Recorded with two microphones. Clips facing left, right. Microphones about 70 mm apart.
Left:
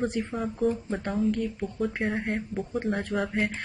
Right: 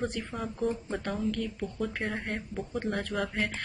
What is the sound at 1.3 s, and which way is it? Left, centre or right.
Speech, centre.